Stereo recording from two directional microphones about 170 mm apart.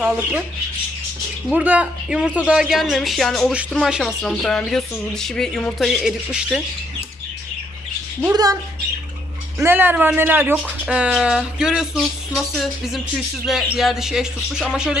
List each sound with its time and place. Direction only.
0.0 s speech: 5° right (ahead or behind)
1.5 s speech: 10° right (ahead or behind)
8.2 s speech: 20° right (ahead or behind)
9.6 s speech: 10° right (ahead or behind)